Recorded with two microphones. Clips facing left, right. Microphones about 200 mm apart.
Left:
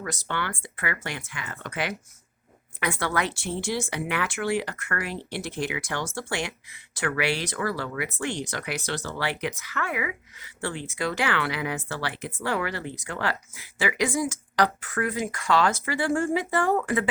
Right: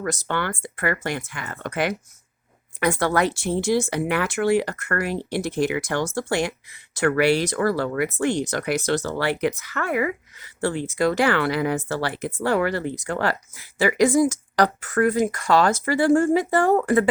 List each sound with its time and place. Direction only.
0.0 s speech: 45° right (ahead or behind)